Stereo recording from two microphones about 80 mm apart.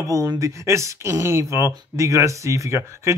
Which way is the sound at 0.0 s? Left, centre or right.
Right.